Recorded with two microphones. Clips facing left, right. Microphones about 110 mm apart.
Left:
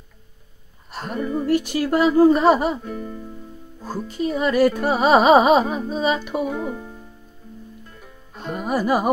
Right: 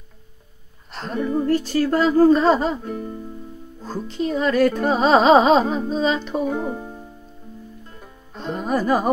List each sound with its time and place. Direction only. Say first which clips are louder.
0.9 s speech: right 1 dB; 10° left (ahead or behind)
1.5 s music: left 1 dB; 15° left (ahead or behind)
2.8 s speech: right 2 dB; 40° right (ahead or behind)
3.8 s music: even; 10° left (ahead or behind)
6.5 s speech: right 2 dB; 30° right (ahead or behind)
8.4 s music: right 1 dB; 10° left (ahead or behind)